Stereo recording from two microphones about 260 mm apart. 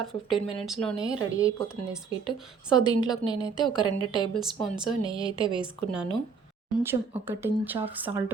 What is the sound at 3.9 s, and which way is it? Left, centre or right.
Speech, right.